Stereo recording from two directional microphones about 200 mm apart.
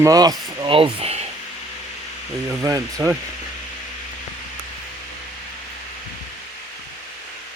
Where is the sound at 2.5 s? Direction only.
15° right (ahead or behind).